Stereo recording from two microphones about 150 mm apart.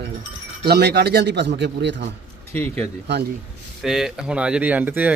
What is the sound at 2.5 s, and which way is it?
Speech, 10° left (ahead or behind).